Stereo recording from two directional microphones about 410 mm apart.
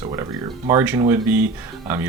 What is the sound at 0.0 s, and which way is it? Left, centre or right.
Speech, centre.